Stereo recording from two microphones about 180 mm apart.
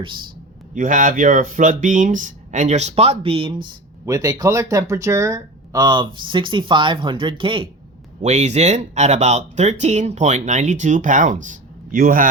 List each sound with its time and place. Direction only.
0.0 s speech: 25° right (ahead or behind)
0.7 s speech: 45° right (ahead or behind); by 7.7 s 30° right (ahead or behind)
8.2 s speech: 40° right (ahead or behind)